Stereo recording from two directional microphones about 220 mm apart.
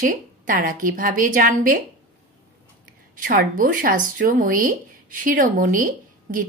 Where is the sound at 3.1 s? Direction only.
35° right (ahead or behind).